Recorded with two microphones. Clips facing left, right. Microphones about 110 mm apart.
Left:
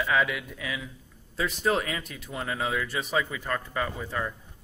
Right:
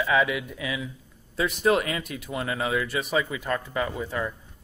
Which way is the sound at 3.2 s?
10° right (ahead or behind).